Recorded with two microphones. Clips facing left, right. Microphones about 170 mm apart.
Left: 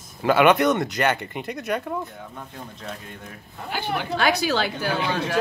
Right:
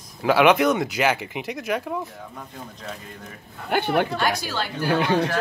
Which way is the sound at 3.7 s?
55° right (ahead or behind).